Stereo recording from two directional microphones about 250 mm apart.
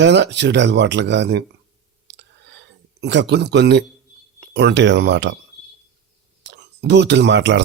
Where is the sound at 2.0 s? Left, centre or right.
Right.